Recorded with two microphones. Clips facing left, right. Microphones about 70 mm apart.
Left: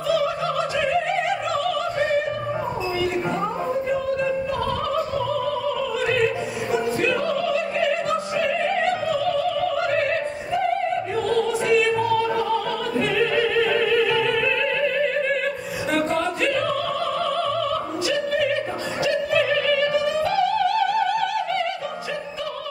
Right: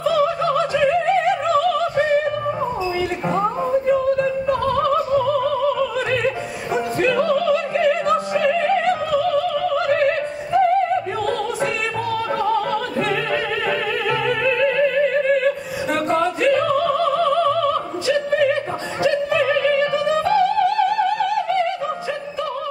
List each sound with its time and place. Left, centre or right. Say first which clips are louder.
13.1 s opera: left 1 dB; right
19.0 s opera: right 3 dB; right